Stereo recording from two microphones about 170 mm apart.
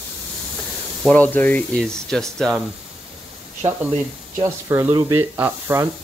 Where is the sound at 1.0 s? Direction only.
10° left (ahead or behind).